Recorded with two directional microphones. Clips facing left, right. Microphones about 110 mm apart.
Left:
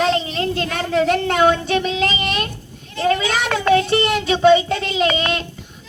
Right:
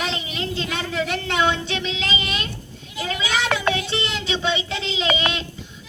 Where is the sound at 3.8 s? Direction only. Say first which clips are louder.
Left 9 dB; 50° left (ahead or behind).